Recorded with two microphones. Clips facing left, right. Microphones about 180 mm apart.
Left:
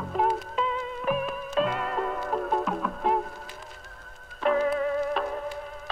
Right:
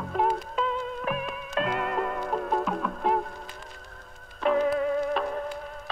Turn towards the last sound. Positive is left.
turn(degrees=0)  # may be behind; listen again after turning